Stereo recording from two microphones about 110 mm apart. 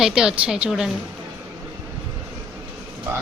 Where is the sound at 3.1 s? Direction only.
20° right (ahead or behind).